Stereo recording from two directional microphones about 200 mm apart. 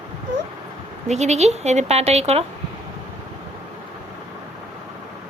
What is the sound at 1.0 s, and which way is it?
Speech, 35° right (ahead or behind).